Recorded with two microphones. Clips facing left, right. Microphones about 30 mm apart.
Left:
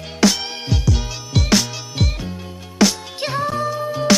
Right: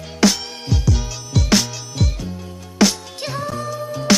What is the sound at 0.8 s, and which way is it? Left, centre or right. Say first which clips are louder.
Music: even; centre.